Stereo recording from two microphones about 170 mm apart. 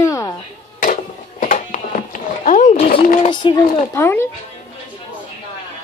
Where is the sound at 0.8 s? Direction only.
50° left (ahead or behind).